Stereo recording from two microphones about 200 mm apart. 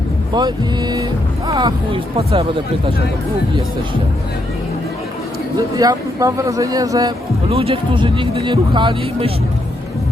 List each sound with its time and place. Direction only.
0.3 s speech: 20° right (ahead or behind)
5.5 s speech: 20° right (ahead or behind)